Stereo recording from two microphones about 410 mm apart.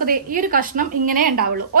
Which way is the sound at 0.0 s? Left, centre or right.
Centre.